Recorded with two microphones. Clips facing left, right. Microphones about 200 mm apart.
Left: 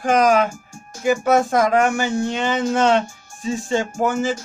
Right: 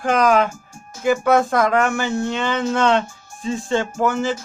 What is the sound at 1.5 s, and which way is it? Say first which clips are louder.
Music: left 1 dB; 15° left (ahead or behind).